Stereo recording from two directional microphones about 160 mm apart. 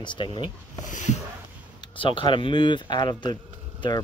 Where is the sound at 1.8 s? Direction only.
30° left (ahead or behind).